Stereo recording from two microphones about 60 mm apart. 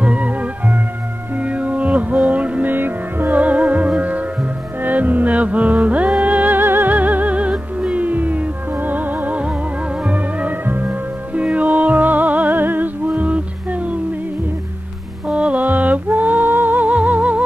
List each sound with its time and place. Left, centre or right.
0.0 s music: right
2.7 s music: right
15.2 s music: centre